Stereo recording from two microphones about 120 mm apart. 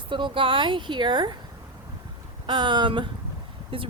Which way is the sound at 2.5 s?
40° right (ahead or behind).